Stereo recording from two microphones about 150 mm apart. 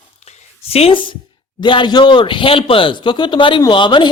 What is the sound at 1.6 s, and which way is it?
Speech, 30° left (ahead or behind).